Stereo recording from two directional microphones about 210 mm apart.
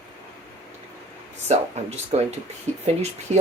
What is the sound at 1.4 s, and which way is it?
Speech, 30° right (ahead or behind).